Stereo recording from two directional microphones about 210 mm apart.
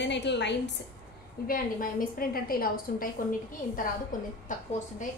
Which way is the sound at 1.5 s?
40° left (ahead or behind).